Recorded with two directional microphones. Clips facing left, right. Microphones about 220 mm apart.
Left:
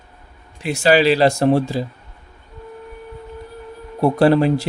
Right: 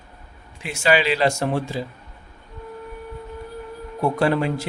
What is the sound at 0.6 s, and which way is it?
A man's voice, 35° left (ahead or behind).